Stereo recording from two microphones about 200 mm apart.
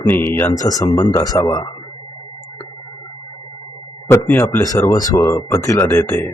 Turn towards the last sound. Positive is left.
turn(degrees=10)  # may be behind; listen again after turning